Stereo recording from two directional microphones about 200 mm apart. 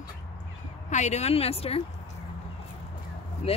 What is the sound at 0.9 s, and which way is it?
Speech, 35° left (ahead or behind).